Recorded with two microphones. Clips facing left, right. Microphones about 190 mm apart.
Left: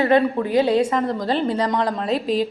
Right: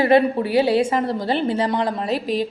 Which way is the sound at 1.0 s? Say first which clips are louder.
Even; 25° right (ahead or behind).